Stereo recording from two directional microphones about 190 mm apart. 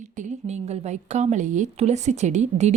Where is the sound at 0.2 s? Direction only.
35° right (ahead or behind).